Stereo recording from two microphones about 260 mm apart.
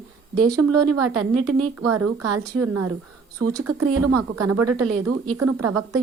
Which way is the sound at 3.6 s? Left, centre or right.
Right.